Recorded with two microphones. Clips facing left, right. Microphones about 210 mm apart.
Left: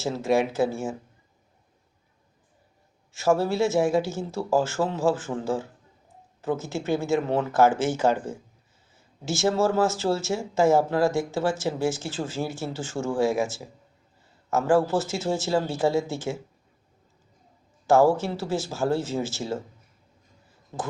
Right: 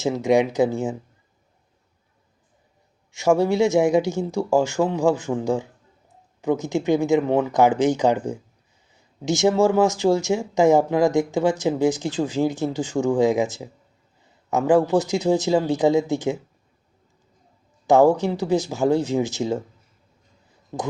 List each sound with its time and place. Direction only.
0.0 s speech: 15° right (ahead or behind)
3.1 s speech: 15° right (ahead or behind)
17.8 s speech: 15° right (ahead or behind)